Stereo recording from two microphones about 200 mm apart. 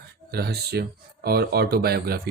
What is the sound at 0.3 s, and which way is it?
Speech, 50° right (ahead or behind).